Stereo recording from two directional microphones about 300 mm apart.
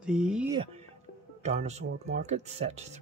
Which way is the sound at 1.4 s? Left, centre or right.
Right.